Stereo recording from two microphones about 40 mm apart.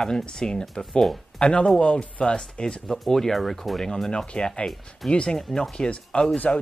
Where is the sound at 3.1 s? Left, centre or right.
Centre.